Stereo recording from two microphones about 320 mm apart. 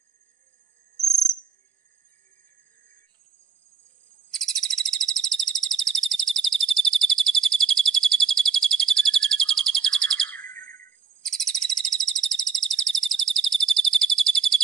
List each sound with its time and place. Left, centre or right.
4.3 s bird vocalization: centre